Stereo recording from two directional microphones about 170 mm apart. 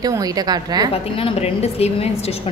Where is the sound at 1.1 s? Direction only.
35° left (ahead or behind).